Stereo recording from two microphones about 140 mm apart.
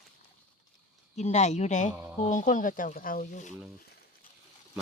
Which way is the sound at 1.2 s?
55° left (ahead or behind).